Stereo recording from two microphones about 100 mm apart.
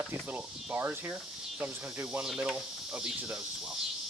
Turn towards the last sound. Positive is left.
turn(degrees=-5)  # may be behind; listen again after turning